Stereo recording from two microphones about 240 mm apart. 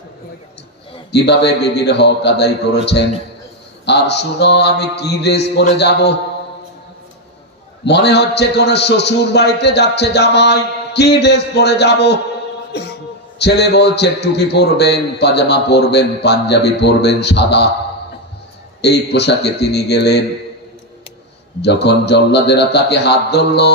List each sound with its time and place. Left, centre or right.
1.1 s a man's voice: left
7.9 s a man's voice: left
13.4 s a man's voice: left
18.8 s a man's voice: left
21.6 s a man's voice: left